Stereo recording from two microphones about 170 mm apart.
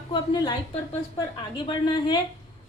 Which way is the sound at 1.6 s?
25° left (ahead or behind).